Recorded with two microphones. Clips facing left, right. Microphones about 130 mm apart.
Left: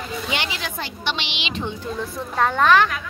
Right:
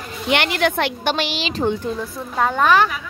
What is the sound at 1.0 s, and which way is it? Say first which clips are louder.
Speech: right 6 dB; 45° right (ahead or behind).